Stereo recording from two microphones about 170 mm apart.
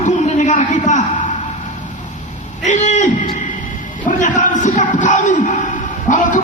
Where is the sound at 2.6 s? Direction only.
45° left (ahead or behind).